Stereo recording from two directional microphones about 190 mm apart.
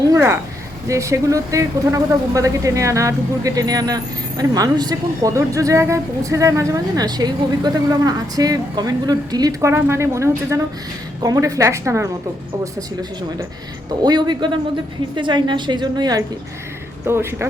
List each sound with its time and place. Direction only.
0.1 s a sound: 15° right (ahead or behind)
0.9 s speech: 15° right (ahead or behind)
14.0 s a woman's voice: 20° right (ahead or behind)